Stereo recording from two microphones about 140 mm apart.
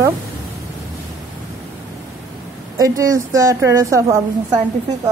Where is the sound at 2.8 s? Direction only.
20° right (ahead or behind).